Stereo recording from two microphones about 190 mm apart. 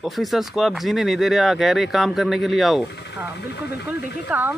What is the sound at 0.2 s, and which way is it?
Speech, centre (ahead or behind).